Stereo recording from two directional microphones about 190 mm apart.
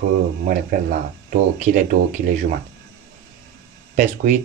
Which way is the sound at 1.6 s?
45° right (ahead or behind).